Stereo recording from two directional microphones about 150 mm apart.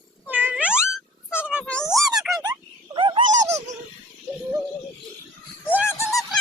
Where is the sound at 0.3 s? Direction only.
10° right (ahead or behind).